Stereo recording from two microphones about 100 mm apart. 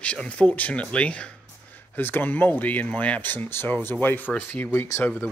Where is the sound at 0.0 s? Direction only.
10° left (ahead or behind).